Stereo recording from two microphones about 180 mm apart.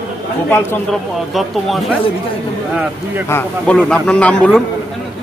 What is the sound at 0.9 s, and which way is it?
Speech, centre (ahead or behind).